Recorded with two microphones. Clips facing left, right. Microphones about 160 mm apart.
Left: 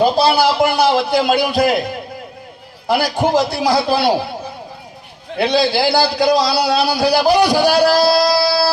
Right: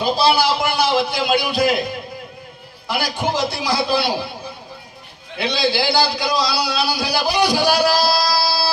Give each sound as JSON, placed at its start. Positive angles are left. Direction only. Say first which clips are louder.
{"t": 0.0, "sound": "a man's voice", "louder": "left 4 dB", "side_deg": 55}
{"t": 2.8, "sound": "a man's voice", "louder": "left 6 dB", "side_deg": 55}
{"t": 5.4, "sound": "a man's voice", "louder": "left 5 dB", "side_deg": 50}